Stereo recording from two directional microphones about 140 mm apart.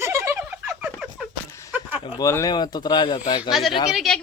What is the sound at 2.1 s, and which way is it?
Speech, 25° left (ahead or behind).